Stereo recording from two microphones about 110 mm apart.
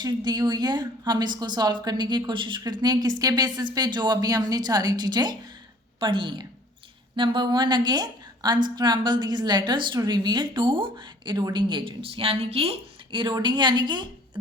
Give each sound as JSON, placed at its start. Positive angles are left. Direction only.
{"t": 0.0, "sound": "a woman's voice", "side_deg": -40}